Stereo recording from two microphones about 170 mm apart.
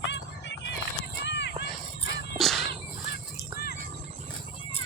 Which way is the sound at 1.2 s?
80° left.